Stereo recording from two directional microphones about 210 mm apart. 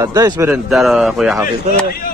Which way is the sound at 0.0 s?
15° right (ahead or behind).